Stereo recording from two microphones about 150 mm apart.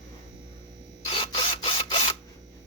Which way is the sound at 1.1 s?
35° left (ahead or behind).